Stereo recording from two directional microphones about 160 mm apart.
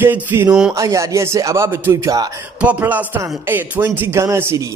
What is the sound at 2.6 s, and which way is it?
Speech, 10° right (ahead or behind).